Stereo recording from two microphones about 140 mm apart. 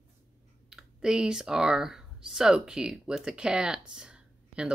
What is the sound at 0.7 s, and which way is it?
Speech, 5° right (ahead or behind).